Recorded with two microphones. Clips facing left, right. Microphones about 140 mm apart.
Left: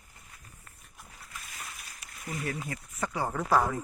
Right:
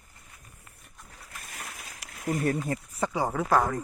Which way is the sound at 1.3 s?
55° right (ahead or behind).